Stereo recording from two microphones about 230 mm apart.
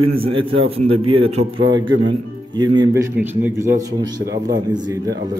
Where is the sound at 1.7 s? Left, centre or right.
Right.